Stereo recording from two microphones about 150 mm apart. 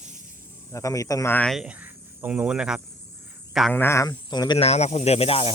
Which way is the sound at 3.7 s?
15° left (ahead or behind).